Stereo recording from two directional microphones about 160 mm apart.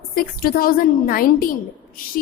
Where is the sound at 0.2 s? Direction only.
65° left (ahead or behind).